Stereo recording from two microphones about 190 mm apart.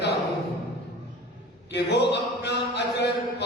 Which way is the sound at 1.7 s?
65° left (ahead or behind).